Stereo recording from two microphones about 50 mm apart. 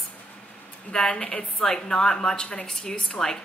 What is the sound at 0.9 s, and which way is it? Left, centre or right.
A woman's voice, centre.